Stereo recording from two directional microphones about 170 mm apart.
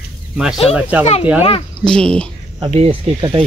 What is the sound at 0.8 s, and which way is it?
Speech, 10° right (ahead or behind).